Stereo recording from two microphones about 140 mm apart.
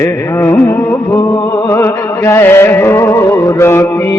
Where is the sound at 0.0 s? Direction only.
20° left (ahead or behind).